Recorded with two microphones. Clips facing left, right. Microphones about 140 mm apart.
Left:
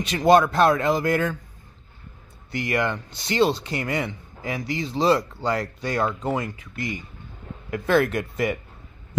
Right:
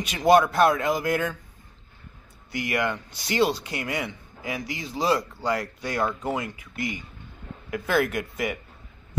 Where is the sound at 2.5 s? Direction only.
10° right (ahead or behind).